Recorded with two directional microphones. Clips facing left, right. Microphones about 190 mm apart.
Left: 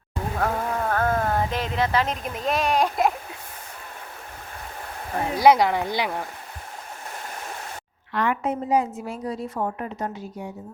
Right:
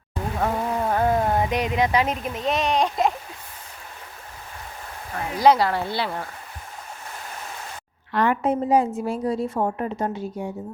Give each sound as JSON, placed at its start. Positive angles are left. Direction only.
{"t": 0.3, "sound": "a sound", "side_deg": -10}
{"t": 2.1, "sound": "speech", "side_deg": 0}
{"t": 5.4, "sound": "speech", "side_deg": 15}
{"t": 8.1, "sound": "a woman's voice", "side_deg": -35}